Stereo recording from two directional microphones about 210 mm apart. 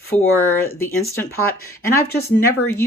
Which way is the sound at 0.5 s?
10° left (ahead or behind).